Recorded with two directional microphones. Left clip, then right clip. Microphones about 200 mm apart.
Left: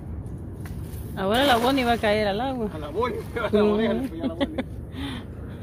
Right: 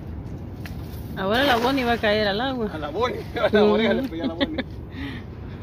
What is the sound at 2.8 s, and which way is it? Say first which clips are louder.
Speech: right 2 dB; 35° right (ahead or behind).